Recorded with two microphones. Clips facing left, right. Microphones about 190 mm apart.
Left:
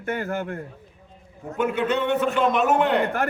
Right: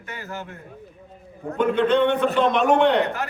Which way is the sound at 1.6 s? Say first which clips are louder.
Right 4 dB; 5° left (ahead or behind).